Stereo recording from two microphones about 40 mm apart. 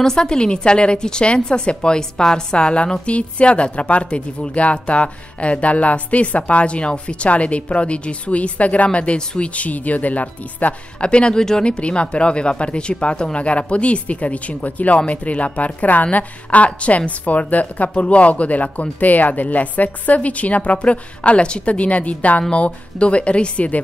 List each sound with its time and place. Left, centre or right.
0.0 s a woman's voice: centre; by 10.7 s left
11.0 s a woman's voice: left